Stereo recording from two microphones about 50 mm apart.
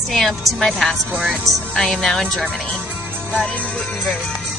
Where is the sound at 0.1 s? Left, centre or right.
Centre.